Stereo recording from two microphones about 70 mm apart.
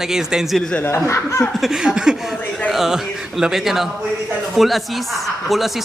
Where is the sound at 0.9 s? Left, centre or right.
Left.